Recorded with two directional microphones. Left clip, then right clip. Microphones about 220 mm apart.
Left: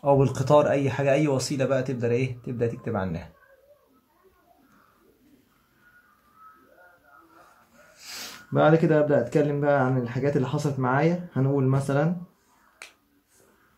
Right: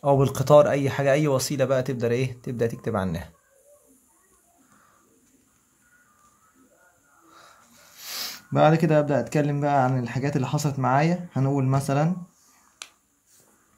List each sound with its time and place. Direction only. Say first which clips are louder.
0.0 s speech: even; 40° right (ahead or behind)
8.0 s speech: right 5 dB; 45° right (ahead or behind)